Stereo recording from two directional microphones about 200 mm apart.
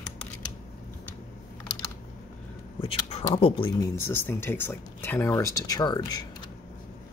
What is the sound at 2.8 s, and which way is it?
Speech, 30° left (ahead or behind).